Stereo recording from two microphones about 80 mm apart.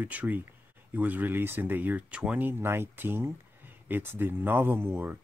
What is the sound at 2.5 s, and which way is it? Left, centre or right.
Speech, right.